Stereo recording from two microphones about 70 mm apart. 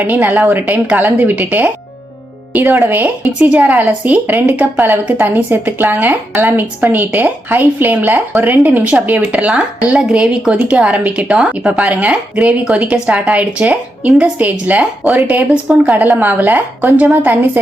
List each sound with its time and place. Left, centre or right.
0.0 s a woman's voice: right
15.6 s a woman's voice: centre
16.1 s a woman's voice: right